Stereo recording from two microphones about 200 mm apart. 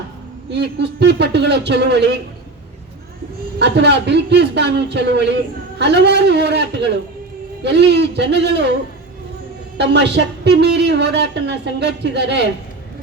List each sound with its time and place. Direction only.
0.5 s a man's voice: 60° right (ahead or behind)
3.6 s a man's voice: 60° right (ahead or behind)
9.7 s a man's voice: 60° right (ahead or behind)